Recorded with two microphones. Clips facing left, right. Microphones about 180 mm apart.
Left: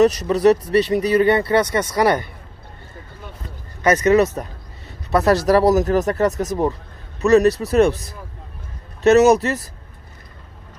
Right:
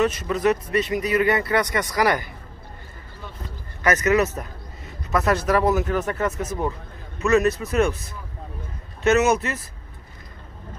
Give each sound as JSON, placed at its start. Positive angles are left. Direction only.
{"t": 0.0, "sound": "speech", "side_deg": 40}
{"t": 3.8, "sound": "a man's voice", "side_deg": 30}